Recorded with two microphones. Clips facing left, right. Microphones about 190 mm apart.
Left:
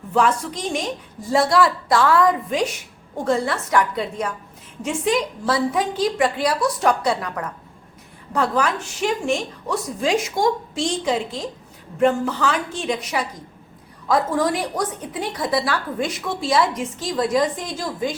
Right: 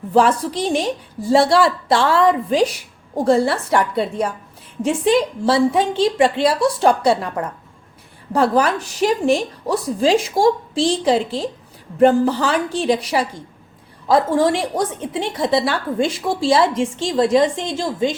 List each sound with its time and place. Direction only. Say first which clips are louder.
0.1 s a woman's voice: right 4 dB; 35° right (ahead or behind)